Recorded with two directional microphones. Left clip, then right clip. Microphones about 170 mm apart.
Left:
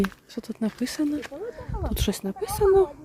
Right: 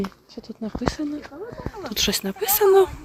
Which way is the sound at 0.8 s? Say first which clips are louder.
Right 2 dB; 30° left (ahead or behind).